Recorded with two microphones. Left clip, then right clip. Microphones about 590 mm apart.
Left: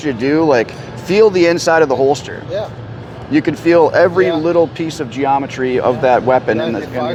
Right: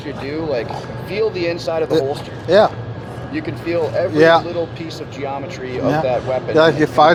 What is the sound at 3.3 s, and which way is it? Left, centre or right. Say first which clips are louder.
Speech: left 10 dB; left.